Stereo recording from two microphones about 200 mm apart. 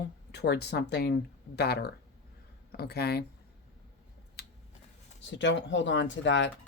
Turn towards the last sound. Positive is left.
turn(degrees=65)  # may be behind; listen again after turning